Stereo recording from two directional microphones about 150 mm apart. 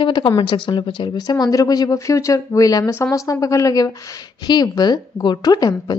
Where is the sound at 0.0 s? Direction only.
30° left (ahead or behind).